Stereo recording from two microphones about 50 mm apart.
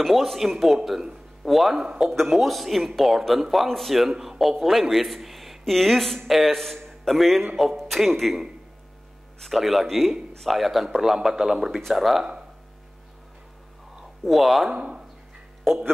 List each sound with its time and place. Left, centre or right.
0.0 s a man's voice: centre
2.0 s a man's voice: centre
14.2 s a man's voice: centre
14.7 s speech: centre
15.7 s a man's voice: centre